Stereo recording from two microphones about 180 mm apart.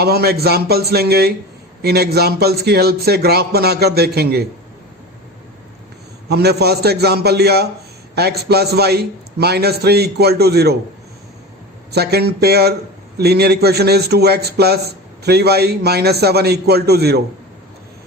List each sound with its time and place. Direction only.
0.0 s a man's voice: 60° right (ahead or behind)
6.2 s a man's voice: 65° right (ahead or behind)
11.9 s a man's voice: 65° right (ahead or behind)